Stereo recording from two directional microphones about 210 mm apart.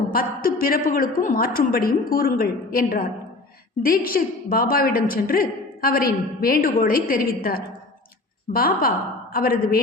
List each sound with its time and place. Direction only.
0.1 s a woman's voice: 45° left (ahead or behind)